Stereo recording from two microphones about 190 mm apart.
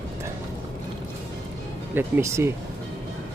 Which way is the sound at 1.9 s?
10° right (ahead or behind).